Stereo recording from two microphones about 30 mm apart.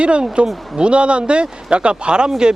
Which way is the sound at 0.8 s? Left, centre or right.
Right.